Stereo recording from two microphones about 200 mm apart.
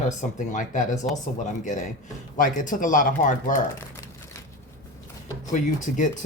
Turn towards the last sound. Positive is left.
turn(degrees=40)  # may be behind; listen again after turning